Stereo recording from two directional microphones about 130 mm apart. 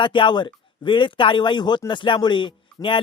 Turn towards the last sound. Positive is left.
turn(degrees=40)  # may be behind; listen again after turning